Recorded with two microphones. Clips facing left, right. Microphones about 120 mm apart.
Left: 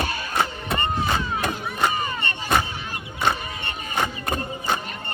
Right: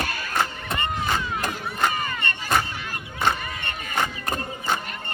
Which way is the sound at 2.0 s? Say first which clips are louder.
Left 1 dB; 20° left (ahead or behind).